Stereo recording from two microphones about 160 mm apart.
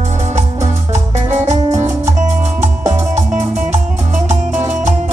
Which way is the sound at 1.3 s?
45° right (ahead or behind).